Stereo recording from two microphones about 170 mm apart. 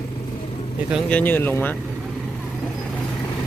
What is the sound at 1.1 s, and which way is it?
Speech, 10° left (ahead or behind).